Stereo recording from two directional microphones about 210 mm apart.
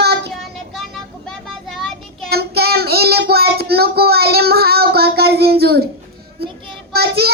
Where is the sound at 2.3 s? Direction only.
50° right (ahead or behind).